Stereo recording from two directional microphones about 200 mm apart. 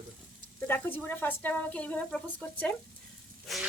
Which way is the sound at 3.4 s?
Centre (ahead or behind).